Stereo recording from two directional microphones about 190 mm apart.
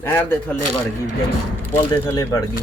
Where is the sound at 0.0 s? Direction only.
10° left (ahead or behind).